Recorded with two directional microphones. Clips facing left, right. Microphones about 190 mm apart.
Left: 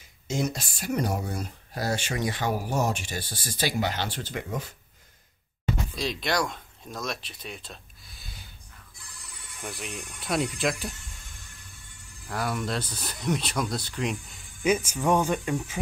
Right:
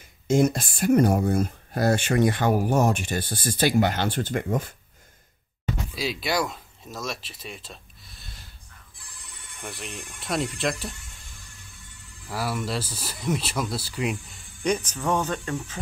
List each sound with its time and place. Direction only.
0.3 s speech: 50° right (ahead or behind)
5.9 s speech: 5° right (ahead or behind)
12.3 s speech: 5° right (ahead or behind); by 15.8 s 10° left (ahead or behind)